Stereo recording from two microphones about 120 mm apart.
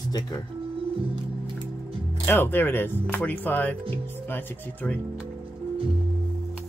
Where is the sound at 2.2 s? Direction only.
20° left (ahead or behind).